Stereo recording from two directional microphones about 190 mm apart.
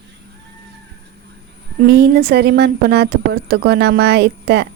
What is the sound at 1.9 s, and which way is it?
A woman's voice, 55° right (ahead or behind).